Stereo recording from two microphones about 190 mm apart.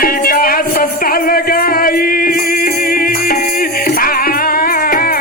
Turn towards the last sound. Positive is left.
turn(degrees=50)  # may be behind; listen again after turning